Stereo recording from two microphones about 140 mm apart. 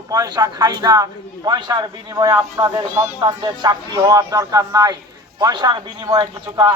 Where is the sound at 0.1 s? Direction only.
30° right (ahead or behind).